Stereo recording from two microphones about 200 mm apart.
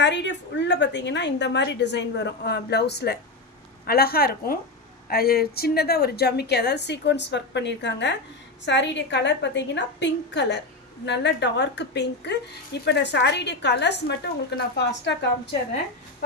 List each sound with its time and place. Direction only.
0.0 s a woman's voice: 60° left (ahead or behind)